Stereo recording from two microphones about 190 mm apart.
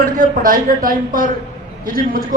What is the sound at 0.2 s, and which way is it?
Speech, 45° right (ahead or behind).